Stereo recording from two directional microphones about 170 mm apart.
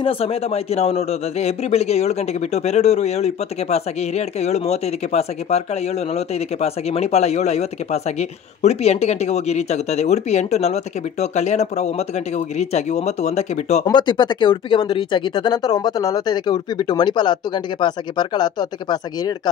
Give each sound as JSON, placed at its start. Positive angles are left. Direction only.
{"t": 0.0, "sound": "a man's voice", "side_deg": 35}
{"t": 13.8, "sound": "speech", "side_deg": 25}